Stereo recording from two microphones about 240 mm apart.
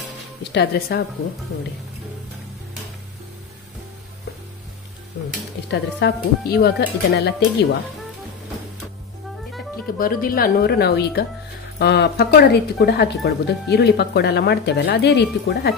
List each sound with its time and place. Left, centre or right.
0.4 s speech: left
5.7 s speech: left
9.9 s speech: left